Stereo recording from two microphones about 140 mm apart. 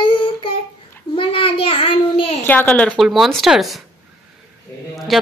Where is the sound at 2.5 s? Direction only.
10° left (ahead or behind).